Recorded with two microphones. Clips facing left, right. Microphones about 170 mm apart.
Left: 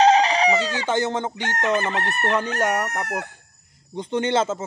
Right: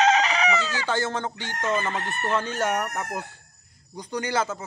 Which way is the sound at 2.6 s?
15° left (ahead or behind).